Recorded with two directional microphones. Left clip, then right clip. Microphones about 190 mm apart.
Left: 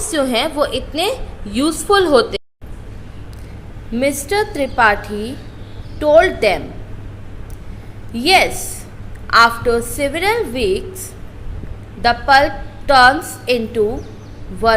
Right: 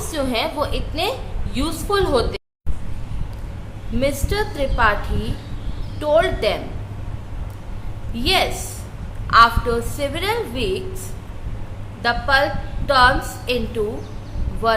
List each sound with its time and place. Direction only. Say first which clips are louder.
0.1 s a woman's voice: left 5 dB; 25° left (ahead or behind)
3.9 s a woman's voice: left 5 dB; 25° left (ahead or behind)
8.1 s a woman's voice: left 6 dB; 25° left (ahead or behind)
12.0 s a woman's voice: left 6 dB; 25° left (ahead or behind)